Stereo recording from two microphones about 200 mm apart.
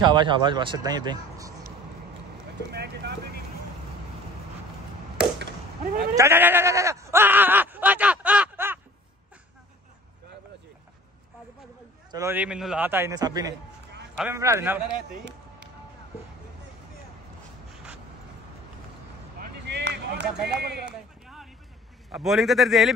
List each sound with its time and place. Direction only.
0.0 s speech: 20° right (ahead or behind)
2.7 s speech: 55° right (ahead or behind)
6.1 s bleat: 10° right (ahead or behind)
12.1 s a man's voice: 15° right (ahead or behind)
19.6 s a sound: 60° right (ahead or behind)
20.4 s run: 55° right (ahead or behind)
22.1 s a man's voice: centre (ahead or behind)